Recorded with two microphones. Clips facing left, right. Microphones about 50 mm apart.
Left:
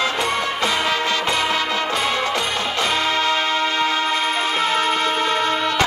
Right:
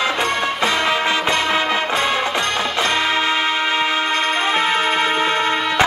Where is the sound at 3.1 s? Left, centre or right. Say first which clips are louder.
Right 1 dB; centre.